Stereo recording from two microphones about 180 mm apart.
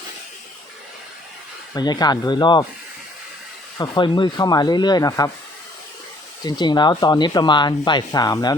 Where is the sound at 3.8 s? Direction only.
25° left (ahead or behind).